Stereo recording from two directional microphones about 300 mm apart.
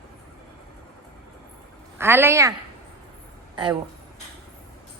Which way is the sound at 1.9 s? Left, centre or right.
Centre.